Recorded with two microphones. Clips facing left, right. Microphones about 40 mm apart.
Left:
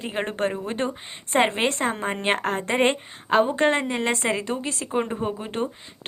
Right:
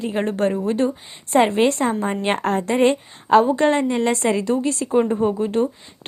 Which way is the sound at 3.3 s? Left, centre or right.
Centre.